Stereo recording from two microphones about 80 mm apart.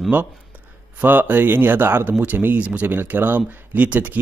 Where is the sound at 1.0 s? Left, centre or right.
Right.